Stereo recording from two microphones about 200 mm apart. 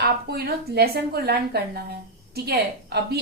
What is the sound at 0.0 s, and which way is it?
Speech, 50° right (ahead or behind).